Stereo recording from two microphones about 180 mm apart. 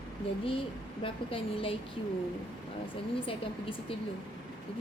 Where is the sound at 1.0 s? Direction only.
30° left (ahead or behind).